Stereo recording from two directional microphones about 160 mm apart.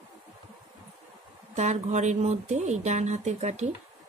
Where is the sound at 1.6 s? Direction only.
45° right (ahead or behind).